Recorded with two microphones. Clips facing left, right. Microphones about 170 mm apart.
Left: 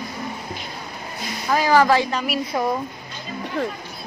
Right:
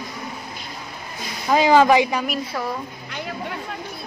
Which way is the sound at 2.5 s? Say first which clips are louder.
Left 7 dB; 20° left (ahead or behind).